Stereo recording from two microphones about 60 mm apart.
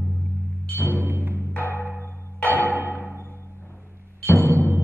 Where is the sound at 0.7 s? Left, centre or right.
Left.